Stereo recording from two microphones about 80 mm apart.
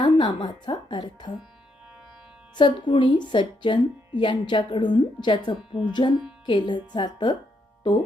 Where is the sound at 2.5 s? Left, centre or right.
Left.